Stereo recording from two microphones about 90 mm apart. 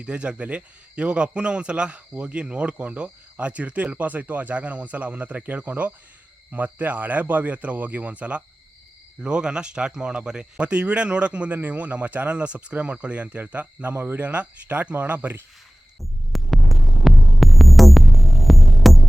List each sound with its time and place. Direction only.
0.0 s speech: 10° right (ahead or behind)
16.0 s throbbing: centre (ahead or behind)